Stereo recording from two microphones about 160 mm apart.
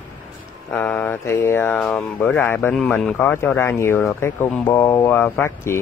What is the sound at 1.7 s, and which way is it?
Speech, centre (ahead or behind).